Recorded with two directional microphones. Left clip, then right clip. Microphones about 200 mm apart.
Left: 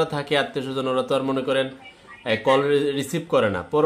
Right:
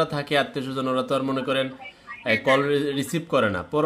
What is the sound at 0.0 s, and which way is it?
Speech, centre (ahead or behind).